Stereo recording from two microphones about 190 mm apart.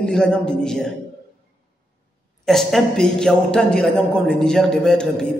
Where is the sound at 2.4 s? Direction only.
Centre (ahead or behind).